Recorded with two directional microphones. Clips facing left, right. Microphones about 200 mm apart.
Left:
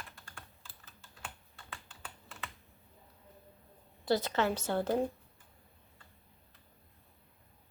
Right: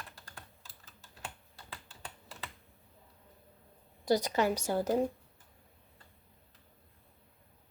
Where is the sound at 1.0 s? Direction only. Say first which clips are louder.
Right 2 dB; 35° right (ahead or behind).